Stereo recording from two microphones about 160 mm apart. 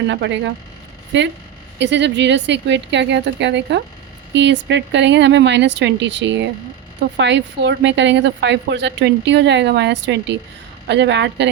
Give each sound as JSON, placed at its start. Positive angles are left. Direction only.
{"t": 1.1, "sound": "a woman's voice", "side_deg": -90}